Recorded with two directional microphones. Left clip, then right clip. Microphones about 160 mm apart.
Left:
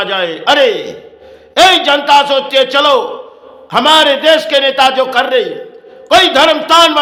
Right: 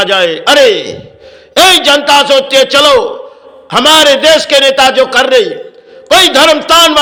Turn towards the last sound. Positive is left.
turn(degrees=-20)  # may be behind; listen again after turning